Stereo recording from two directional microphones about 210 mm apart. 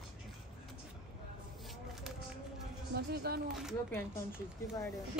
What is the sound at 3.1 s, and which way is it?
Speech, 50° right (ahead or behind).